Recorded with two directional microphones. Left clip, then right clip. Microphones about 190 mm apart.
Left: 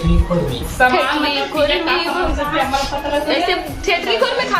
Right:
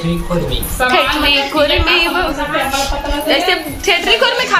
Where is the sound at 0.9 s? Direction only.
15° right (ahead or behind).